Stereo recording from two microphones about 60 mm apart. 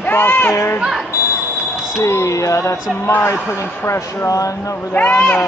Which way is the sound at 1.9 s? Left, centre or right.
Left.